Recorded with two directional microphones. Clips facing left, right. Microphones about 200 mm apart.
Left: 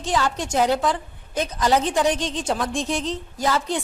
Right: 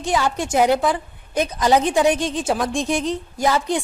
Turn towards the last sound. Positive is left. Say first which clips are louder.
# right 3 dB
turn(degrees=-15)  # may be behind; listen again after turning